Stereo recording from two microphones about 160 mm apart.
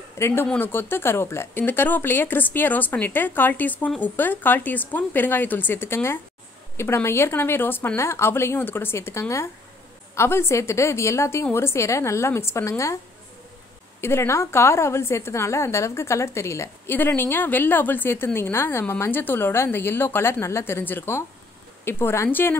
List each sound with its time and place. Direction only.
0.2 s a woman's voice: 15° left (ahead or behind)
14.0 s a woman's voice: 15° left (ahead or behind)